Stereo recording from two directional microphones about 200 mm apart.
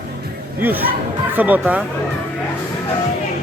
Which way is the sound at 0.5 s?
10° right (ahead or behind).